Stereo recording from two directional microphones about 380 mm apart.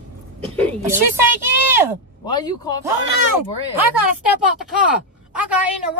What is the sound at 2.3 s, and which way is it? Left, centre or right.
Speech, centre.